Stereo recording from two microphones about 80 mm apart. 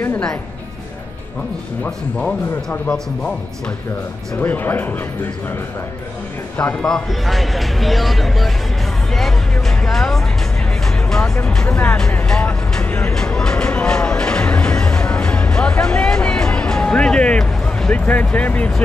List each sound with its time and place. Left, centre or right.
4.4 s speech: left
6.6 s speech: centre
11.1 s music: centre
11.4 s speech: centre
11.7 s speech: centre
12.1 s vehicle: centre